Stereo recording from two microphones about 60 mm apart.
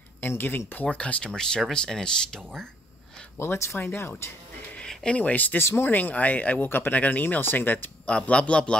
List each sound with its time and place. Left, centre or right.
0.2 s speech: left; by 2.7 s centre
3.3 s speech: left
4.7 s speech: centre
5.6 s speech: left
5.9 s speech: left
8.1 s speech: centre